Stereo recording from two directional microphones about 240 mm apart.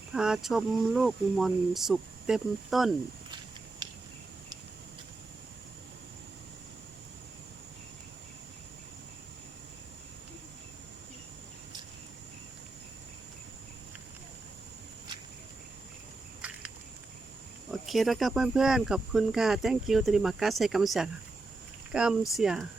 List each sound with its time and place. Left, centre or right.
0.1 s speech: centre
3.8 s cricket: centre
17.7 s speech: centre